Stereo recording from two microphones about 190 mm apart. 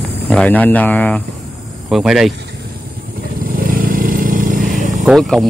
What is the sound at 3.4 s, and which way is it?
Vehicle, 50° right (ahead or behind).